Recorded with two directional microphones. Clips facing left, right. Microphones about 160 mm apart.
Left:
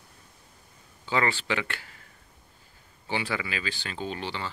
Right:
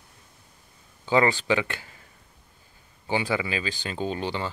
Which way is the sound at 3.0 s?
15° right (ahead or behind).